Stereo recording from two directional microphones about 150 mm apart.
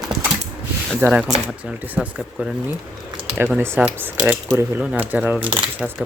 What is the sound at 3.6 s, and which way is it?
Speech, 15° right (ahead or behind).